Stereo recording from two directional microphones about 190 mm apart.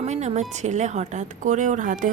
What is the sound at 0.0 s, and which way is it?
A woman's voice, 35° right (ahead or behind).